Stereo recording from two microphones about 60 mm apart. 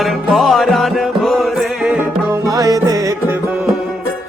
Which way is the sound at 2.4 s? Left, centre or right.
Right.